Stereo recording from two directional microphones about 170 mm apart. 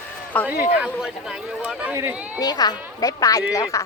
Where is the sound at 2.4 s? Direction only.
25° left (ahead or behind).